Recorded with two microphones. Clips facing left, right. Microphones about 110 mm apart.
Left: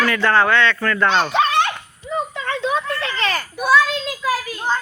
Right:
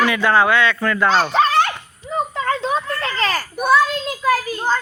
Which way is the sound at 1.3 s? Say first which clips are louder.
Right 2 dB; 35° right (ahead or behind).